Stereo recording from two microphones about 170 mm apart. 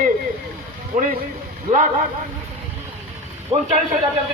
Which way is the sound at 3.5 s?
40° right (ahead or behind).